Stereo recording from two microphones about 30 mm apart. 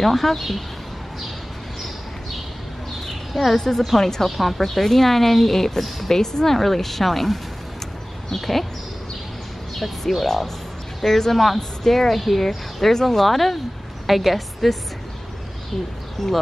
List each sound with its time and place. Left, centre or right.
0.0 s speech: centre
3.5 s a woman's voice: centre
9.8 s a woman's voice: centre
16.2 s a woman's voice: centre